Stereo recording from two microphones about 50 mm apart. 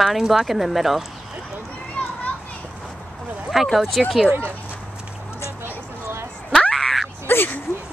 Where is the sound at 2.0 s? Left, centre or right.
Left.